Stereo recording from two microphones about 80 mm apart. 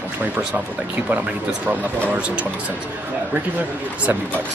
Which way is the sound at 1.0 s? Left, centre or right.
Centre.